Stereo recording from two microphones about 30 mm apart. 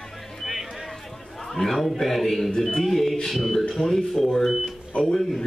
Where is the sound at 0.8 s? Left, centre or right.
Centre.